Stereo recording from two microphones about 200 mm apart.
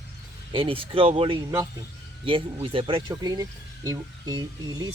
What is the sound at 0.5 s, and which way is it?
Speech, 25° right (ahead or behind).